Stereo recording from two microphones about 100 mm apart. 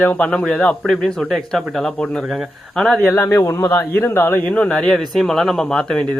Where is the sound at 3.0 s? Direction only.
20° left (ahead or behind).